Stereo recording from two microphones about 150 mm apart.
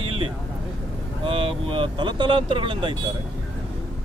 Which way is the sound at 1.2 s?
35° right (ahead or behind).